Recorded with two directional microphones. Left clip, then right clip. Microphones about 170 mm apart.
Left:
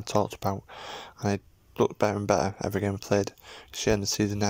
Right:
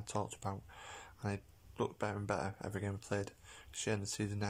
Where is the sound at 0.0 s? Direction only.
35° left (ahead or behind).